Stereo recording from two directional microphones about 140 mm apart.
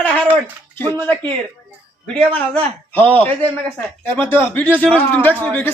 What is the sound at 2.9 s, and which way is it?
A man's voice, 10° left (ahead or behind).